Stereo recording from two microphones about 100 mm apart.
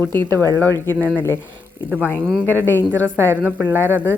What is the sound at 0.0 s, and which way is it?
Speech, 20° left (ahead or behind).